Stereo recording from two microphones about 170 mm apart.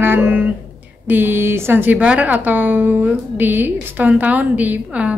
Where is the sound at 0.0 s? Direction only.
10° right (ahead or behind).